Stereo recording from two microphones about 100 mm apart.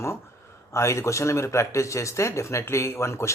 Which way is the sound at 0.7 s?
30° left (ahead or behind).